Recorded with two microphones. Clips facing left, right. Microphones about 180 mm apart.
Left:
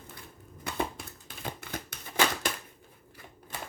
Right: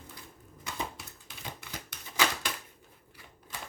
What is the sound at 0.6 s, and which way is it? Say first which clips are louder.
Typewriter: left 5 dB; 55° left (ahead or behind).